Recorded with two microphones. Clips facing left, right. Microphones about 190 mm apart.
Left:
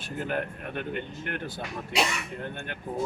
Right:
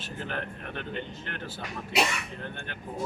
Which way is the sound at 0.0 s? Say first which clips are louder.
Left 5 dB; 15° left (ahead or behind).